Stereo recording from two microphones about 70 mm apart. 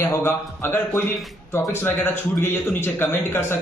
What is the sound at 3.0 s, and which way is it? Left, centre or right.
Speech, left.